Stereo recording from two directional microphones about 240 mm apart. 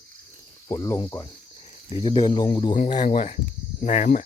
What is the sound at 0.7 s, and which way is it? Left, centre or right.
Cricket, centre.